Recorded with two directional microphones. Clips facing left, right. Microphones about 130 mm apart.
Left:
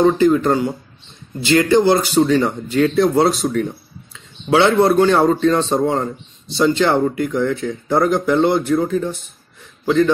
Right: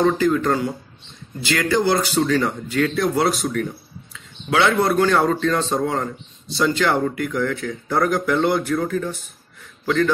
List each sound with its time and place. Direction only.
0.0 s speech: 25° left (ahead or behind)